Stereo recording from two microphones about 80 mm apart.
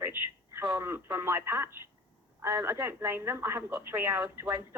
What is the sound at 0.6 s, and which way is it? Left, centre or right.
Radio, right.